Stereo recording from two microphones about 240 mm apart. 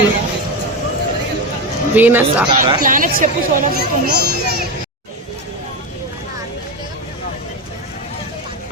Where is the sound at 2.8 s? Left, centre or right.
Right.